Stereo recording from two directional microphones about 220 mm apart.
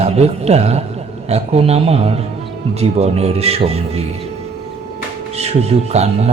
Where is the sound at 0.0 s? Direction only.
30° right (ahead or behind).